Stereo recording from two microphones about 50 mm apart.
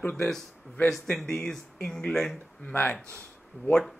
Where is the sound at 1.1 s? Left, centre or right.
Centre.